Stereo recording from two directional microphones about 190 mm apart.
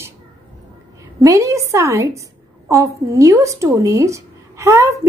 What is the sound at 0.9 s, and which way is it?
A woman's voice, 15° right (ahead or behind).